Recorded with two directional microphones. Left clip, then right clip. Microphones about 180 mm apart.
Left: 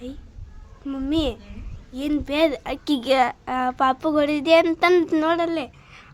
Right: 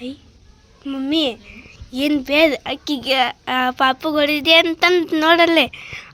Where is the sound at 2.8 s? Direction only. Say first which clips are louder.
Right 1 dB; 10° left (ahead or behind).